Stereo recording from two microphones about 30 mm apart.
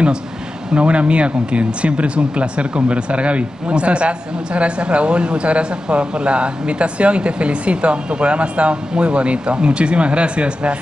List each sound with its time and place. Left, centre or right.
0.7 s speech: right